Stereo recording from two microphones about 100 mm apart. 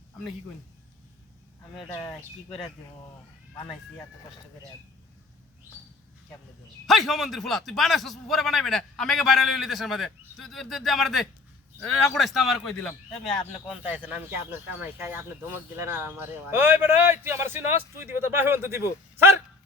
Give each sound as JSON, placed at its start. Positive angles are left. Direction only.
{"t": 2.0, "sound": "a man's voice", "side_deg": 5}
{"t": 6.8, "sound": "a man's voice", "side_deg": 0}
{"t": 13.7, "sound": "speech", "side_deg": -15}